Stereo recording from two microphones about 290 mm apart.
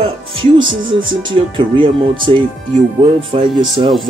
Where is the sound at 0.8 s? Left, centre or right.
Centre.